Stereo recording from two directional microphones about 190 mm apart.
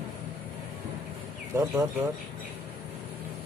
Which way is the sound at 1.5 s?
20° right (ahead or behind).